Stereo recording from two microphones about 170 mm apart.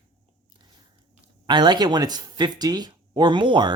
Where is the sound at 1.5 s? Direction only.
25° right (ahead or behind).